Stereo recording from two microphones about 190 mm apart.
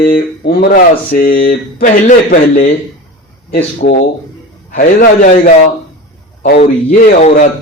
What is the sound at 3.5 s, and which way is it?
Speech, 60° left (ahead or behind).